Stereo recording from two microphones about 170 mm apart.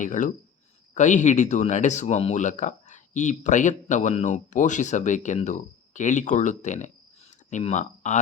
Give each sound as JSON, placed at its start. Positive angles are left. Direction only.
{"t": 0.0, "sound": "speech", "side_deg": 50}